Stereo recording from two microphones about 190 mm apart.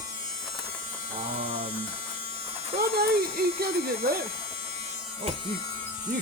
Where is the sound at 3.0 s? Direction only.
55° right (ahead or behind).